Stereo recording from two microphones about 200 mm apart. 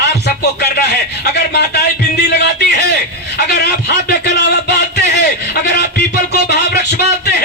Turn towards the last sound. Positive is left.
turn(degrees=55)  # may be behind; listen again after turning